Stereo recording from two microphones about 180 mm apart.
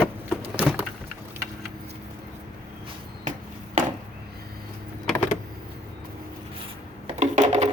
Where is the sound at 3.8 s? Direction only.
45° right (ahead or behind).